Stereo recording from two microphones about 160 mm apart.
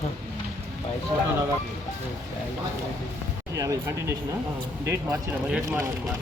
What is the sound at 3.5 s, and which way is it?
Speech, 20° right (ahead or behind).